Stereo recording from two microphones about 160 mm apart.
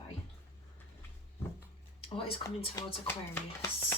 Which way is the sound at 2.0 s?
35° left (ahead or behind).